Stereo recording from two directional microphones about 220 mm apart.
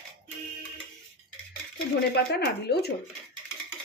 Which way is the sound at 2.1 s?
45° left (ahead or behind).